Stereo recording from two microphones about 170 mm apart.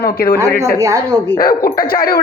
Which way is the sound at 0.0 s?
60° left (ahead or behind).